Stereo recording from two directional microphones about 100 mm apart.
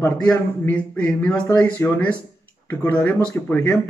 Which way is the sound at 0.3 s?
10° left (ahead or behind).